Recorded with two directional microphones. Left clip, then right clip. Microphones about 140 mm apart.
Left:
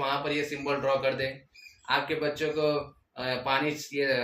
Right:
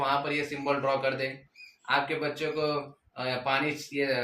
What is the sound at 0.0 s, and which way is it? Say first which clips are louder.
Speech: right 1 dB; 15° right (ahead or behind).